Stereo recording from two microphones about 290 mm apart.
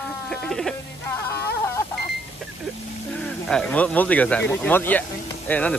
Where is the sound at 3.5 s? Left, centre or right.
Centre.